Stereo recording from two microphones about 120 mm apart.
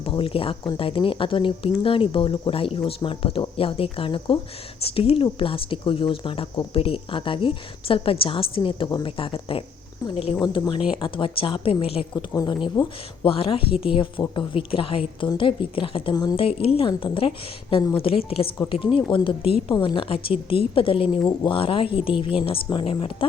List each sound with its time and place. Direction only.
0.0 s speech: 50° left (ahead or behind)
12.1 s a woman's voice: 30° left (ahead or behind)
12.8 s speech: 40° left (ahead or behind)